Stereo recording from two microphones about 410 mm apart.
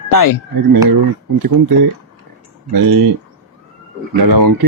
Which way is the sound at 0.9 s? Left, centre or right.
Right.